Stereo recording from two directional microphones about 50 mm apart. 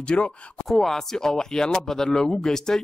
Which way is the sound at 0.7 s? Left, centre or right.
Centre.